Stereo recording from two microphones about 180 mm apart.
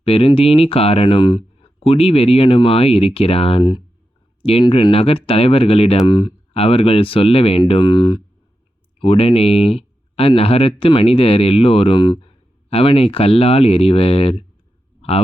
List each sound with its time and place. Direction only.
0.0 s speech: 30° left (ahead or behind)